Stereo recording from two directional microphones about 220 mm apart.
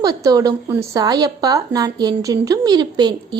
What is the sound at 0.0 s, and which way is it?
A woman's voice, 15° right (ahead or behind).